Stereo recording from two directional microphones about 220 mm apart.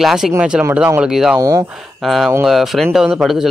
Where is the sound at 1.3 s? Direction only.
15° right (ahead or behind).